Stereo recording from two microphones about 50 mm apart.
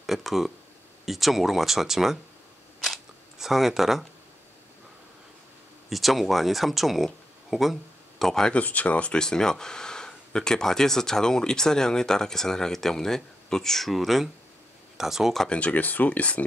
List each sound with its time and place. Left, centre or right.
0.0 s a sound: centre
1.0 s speech: centre
3.3 s speech: centre
5.9 s speech: centre
8.5 s speech: left
9.2 s speech: centre
15.5 s speech: left